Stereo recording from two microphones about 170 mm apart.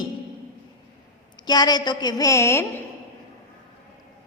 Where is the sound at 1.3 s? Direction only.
25° left (ahead or behind).